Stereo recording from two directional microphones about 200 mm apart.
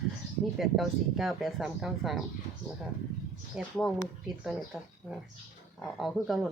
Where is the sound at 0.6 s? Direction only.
Centre (ahead or behind).